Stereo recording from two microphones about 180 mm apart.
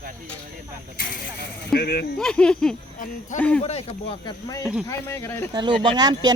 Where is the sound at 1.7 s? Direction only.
65° left (ahead or behind).